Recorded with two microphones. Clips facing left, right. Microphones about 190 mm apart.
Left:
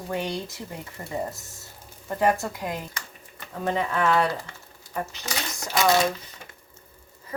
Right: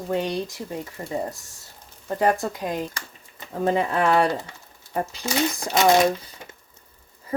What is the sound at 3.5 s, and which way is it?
Speech, 30° right (ahead or behind).